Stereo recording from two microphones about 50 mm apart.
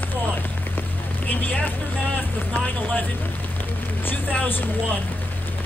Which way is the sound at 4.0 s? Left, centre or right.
Left.